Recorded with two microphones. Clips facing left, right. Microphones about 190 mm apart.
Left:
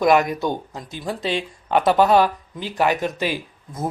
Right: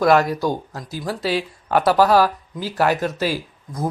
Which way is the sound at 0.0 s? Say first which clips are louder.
Right 1 dB; 15° left (ahead or behind).